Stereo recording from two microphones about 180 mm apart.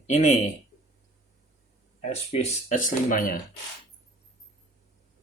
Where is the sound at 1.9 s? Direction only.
35° left (ahead or behind).